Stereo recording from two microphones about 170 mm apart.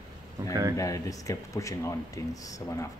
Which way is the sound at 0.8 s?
20° left (ahead or behind).